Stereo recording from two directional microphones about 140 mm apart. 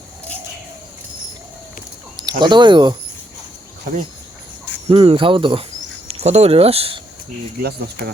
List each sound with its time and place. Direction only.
2.4 s speech: 35° right (ahead or behind)
4.9 s speech: 35° right (ahead or behind)
6.1 s speech: 50° right (ahead or behind)